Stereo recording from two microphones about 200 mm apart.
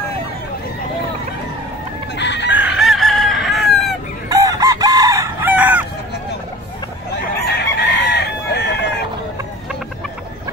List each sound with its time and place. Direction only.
2.1 s chicken: 60° left (ahead or behind)
2.5 s chicken: 5° right (ahead or behind)
4.3 s chicken: 20° right (ahead or behind)
7.4 s chicken: 55° left (ahead or behind)